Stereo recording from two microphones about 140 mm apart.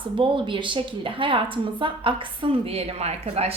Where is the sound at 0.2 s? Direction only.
35° right (ahead or behind).